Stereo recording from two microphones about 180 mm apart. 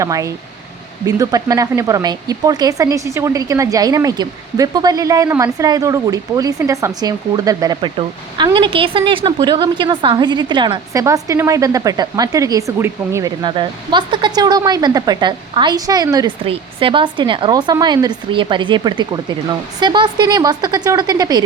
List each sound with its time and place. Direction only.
0.0 s speech: 15° right (ahead or behind)